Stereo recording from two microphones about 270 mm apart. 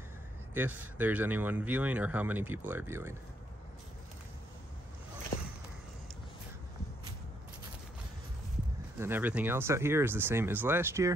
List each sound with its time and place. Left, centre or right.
0.6 s speech: centre
9.0 s speech: centre